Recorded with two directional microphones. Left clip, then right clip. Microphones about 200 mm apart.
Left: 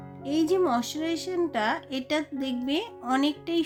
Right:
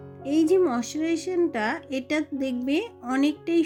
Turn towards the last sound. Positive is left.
turn(degrees=-10)  # may be behind; listen again after turning